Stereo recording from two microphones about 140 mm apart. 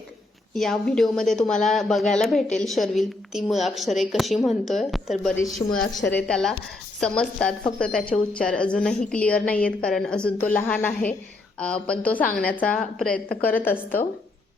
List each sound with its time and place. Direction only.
0.5 s a woman's voice: centre (ahead or behind)